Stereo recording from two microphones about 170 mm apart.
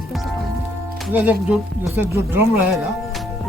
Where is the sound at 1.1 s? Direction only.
10° right (ahead or behind).